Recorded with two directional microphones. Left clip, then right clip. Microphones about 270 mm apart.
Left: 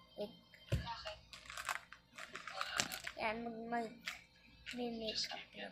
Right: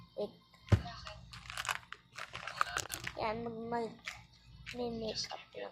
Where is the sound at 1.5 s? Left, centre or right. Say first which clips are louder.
Right 5 dB; right.